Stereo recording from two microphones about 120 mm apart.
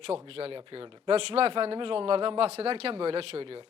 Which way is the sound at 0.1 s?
55° right (ahead or behind).